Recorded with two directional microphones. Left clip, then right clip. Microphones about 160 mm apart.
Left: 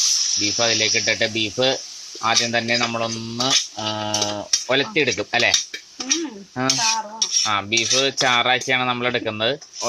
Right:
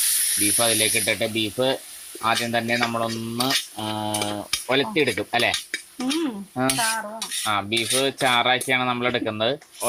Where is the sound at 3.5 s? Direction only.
5° right (ahead or behind).